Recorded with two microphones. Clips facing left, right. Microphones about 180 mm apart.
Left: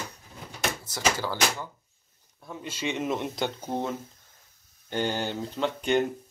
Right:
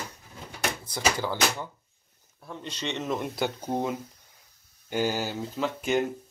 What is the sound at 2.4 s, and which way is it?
Speech, 5° left (ahead or behind).